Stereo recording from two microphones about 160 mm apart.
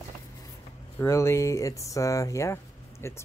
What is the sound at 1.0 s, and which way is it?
Speech, 15° left (ahead or behind).